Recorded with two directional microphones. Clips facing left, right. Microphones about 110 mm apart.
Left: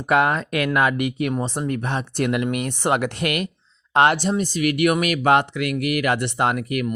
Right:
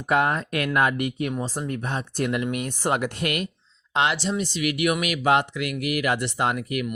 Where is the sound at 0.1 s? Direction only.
90° left.